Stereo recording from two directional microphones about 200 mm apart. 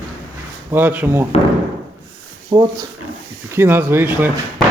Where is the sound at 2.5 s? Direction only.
20° right (ahead or behind).